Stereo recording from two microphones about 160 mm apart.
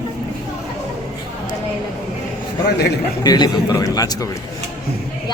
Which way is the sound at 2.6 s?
90° left.